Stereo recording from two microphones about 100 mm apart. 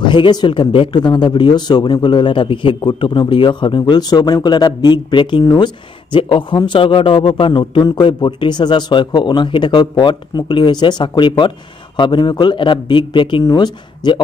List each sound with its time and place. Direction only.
0.0 s speech: 50° left (ahead or behind)
13.4 s speech: 40° left (ahead or behind)